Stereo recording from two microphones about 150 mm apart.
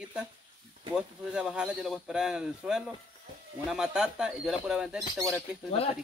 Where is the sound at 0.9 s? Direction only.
5° right (ahead or behind).